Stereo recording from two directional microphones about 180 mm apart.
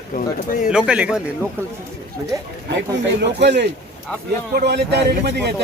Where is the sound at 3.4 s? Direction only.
70° right (ahead or behind).